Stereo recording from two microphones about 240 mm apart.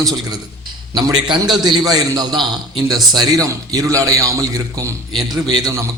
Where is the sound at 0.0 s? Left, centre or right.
Centre.